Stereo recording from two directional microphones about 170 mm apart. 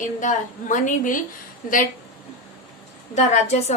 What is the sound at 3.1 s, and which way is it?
Speech, 40° left (ahead or behind).